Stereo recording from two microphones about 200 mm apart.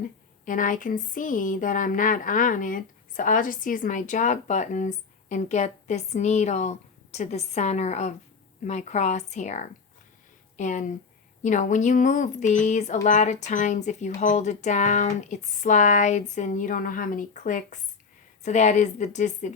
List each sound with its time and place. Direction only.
0.4 s speech: 40° left (ahead or behind)